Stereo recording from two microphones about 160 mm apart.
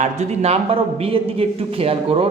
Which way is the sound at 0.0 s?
45° right (ahead or behind).